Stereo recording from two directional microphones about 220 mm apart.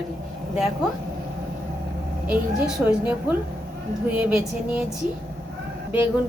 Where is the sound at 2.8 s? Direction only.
10° right (ahead or behind).